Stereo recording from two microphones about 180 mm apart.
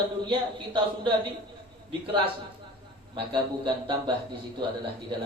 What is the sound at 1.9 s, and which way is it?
Speech, 30° right (ahead or behind).